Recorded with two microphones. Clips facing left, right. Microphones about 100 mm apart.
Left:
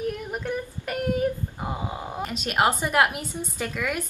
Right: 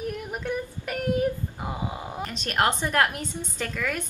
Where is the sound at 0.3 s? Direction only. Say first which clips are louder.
Even; centre (ahead or behind).